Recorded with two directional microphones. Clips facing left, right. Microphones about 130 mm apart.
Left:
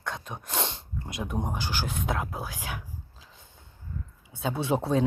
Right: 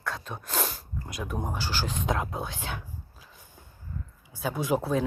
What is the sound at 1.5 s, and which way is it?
Speech, 15° left (ahead or behind).